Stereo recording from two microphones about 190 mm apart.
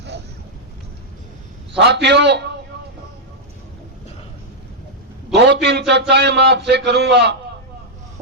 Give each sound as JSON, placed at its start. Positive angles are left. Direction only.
{"t": 1.7, "sound": "a man's voice", "side_deg": -65}
{"t": 5.3, "sound": "a man's voice", "side_deg": -60}